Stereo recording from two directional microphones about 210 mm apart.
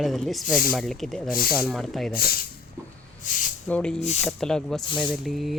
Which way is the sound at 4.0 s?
30° left (ahead or behind).